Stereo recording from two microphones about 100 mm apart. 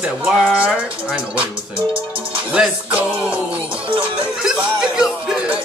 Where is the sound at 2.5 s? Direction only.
10° right (ahead or behind).